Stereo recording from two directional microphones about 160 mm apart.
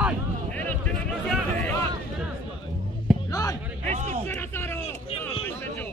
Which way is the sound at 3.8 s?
45° right (ahead or behind).